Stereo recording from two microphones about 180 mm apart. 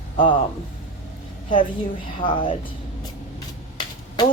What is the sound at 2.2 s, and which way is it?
Speech, 25° left (ahead or behind).